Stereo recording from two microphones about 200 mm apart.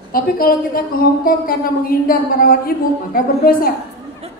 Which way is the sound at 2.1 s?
45° left (ahead or behind).